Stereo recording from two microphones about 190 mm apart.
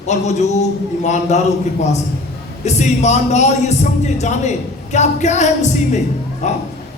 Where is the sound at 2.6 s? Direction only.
35° left (ahead or behind).